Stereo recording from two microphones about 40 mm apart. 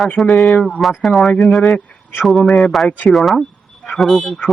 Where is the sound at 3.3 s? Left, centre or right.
Centre.